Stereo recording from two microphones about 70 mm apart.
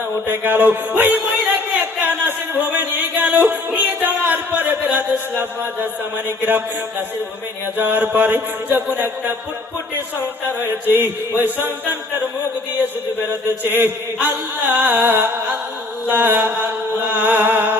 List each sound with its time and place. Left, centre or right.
0.3 s chant: right
2.0 s music: right
7.8 s chant: right
10.8 s chant: right
13.7 s chant: right
16.1 s music: right